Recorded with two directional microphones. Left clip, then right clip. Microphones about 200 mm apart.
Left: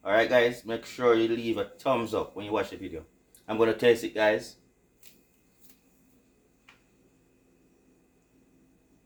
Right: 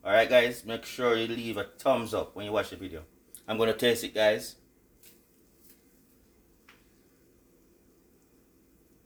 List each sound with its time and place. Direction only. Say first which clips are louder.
0.0 s speech: even; 30° right (ahead or behind)